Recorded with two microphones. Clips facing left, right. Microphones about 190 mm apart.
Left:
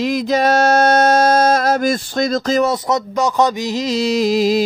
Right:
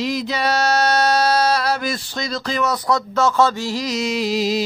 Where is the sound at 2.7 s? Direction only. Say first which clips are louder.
Left 2 dB; 20° left (ahead or behind); by 4.6 s 50° left (ahead or behind).